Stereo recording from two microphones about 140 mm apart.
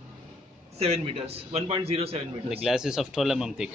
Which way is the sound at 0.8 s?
50° right (ahead or behind).